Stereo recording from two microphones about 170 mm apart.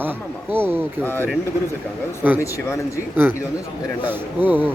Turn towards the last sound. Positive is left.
turn(degrees=-10)  # may be behind; listen again after turning